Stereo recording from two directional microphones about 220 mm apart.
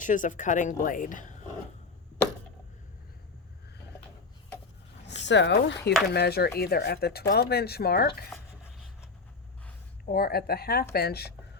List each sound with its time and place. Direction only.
0.0 s speech: 35° left (ahead or behind)
5.2 s speech: 55° left (ahead or behind)
10.1 s speech: 45° left (ahead or behind)